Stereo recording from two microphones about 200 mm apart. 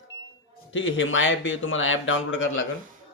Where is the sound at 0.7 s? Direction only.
70° left (ahead or behind).